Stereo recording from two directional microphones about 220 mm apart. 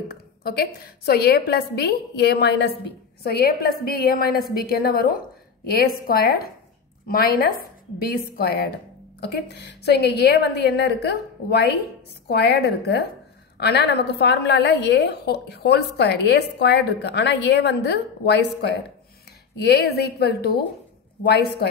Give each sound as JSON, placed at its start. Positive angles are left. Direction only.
{"t": 0.1, "sound": "a woman's voice", "side_deg": 45}
{"t": 12.3, "sound": "a woman's voice", "side_deg": 45}